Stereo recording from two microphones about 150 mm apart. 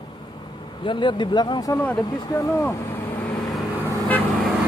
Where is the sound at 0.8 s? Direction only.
30° left (ahead or behind).